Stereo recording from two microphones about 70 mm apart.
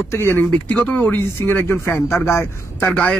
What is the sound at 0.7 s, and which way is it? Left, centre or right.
Speech, left.